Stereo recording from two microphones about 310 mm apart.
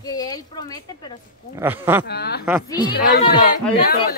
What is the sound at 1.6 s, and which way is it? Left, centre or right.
Speech, centre.